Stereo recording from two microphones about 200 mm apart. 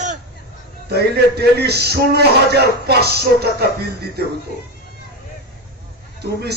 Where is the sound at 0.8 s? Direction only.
55° right (ahead or behind).